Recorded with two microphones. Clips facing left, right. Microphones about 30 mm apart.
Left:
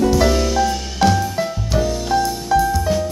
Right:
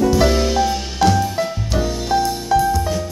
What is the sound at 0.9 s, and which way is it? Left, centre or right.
Music, centre.